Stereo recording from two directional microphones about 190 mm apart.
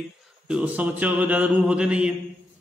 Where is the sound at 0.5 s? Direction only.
5° right (ahead or behind).